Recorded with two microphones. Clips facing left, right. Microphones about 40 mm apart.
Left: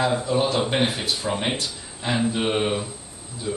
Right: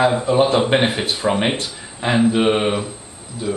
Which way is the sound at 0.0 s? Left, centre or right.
Right.